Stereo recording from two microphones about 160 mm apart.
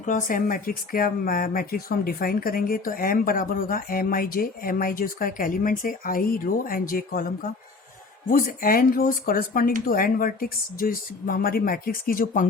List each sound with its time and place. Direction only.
0.0 s speech: 55° left (ahead or behind)